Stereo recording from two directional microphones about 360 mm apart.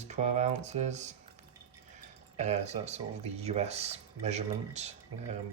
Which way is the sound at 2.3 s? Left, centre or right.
Centre.